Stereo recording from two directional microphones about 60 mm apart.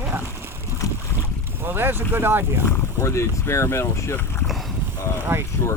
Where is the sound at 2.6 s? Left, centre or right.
Left.